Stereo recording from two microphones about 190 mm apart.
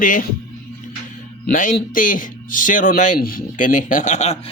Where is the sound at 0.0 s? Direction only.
45° left (ahead or behind).